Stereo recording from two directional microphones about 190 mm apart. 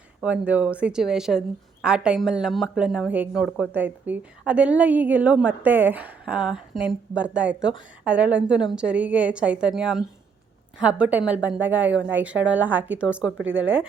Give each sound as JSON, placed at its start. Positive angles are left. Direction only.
{"t": 0.2, "sound": "a woman's voice", "side_deg": -5}
{"t": 13.2, "sound": "speech", "side_deg": -85}